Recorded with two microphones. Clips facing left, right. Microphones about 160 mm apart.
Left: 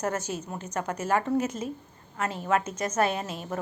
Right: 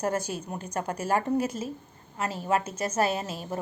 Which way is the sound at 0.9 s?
35° right (ahead or behind).